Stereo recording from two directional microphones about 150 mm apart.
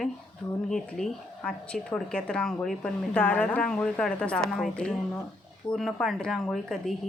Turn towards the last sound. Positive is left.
turn(degrees=0)  # may be behind; listen again after turning